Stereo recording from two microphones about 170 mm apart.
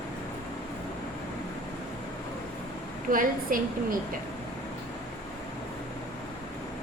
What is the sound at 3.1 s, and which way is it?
Speech, 55° right (ahead or behind).